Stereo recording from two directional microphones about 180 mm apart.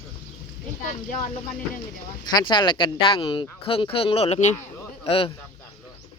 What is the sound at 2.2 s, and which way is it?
Speech, 25° left (ahead or behind).